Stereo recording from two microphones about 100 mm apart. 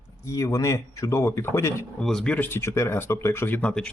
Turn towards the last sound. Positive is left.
turn(degrees=10)  # may be behind; listen again after turning